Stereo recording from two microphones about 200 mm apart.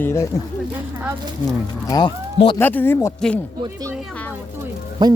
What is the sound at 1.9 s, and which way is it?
Speech, 25° left (ahead or behind).